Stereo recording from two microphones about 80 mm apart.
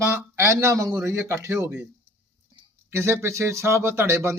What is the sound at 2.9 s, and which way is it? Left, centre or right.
Speech, right.